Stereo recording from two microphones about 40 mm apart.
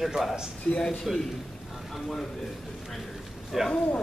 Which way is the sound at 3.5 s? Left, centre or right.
Centre.